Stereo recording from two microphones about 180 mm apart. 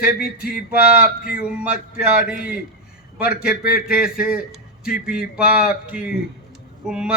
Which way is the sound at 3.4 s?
60° left (ahead or behind).